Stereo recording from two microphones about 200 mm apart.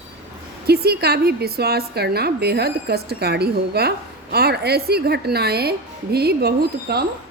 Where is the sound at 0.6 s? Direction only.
55° right (ahead or behind).